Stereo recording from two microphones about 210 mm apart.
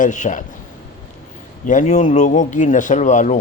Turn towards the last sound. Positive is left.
turn(degrees=35)  # may be behind; listen again after turning